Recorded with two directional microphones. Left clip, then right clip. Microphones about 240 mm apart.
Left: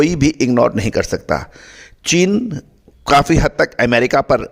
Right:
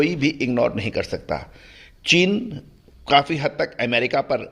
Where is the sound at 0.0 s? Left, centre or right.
Left.